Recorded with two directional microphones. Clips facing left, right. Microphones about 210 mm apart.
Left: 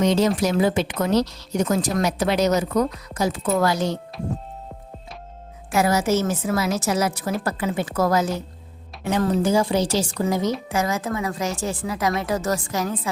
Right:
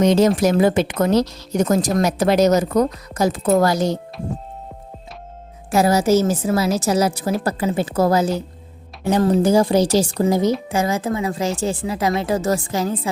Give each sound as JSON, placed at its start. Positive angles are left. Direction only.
{"t": 0.0, "sound": "a woman's voice", "side_deg": -45}
{"t": 5.7, "sound": "a woman's voice", "side_deg": -35}